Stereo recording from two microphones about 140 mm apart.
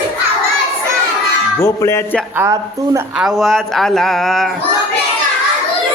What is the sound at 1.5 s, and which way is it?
Speech, 20° left (ahead or behind).